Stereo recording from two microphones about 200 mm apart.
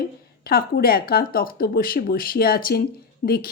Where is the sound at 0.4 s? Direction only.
50° left (ahead or behind).